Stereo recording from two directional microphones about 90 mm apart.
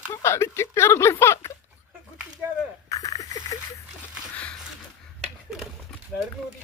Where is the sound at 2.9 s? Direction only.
40° left (ahead or behind).